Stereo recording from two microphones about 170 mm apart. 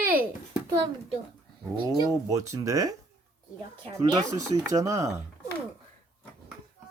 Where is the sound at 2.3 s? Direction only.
20° right (ahead or behind).